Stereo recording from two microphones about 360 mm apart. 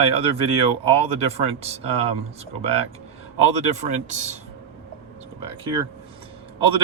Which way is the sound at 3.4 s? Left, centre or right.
Centre.